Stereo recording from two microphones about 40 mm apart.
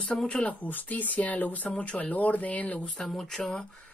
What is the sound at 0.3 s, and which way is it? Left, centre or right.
Speech, left.